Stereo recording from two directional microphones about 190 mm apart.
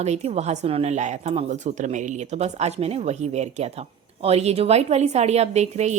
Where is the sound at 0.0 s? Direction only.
35° right (ahead or behind).